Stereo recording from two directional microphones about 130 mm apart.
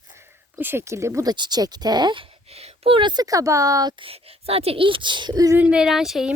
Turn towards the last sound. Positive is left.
turn(degrees=-5)  # may be behind; listen again after turning